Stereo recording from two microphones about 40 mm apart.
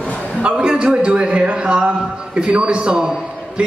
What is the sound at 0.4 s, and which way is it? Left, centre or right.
A man's voice, right.